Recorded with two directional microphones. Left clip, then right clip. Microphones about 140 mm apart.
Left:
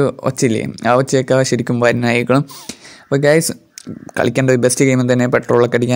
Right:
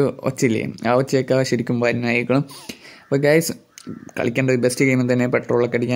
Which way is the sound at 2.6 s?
35° left (ahead or behind).